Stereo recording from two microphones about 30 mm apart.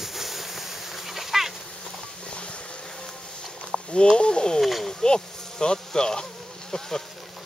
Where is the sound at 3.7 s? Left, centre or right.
Right.